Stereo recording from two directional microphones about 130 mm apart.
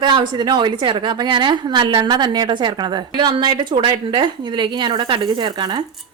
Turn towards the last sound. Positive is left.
turn(degrees=-35)  # may be behind; listen again after turning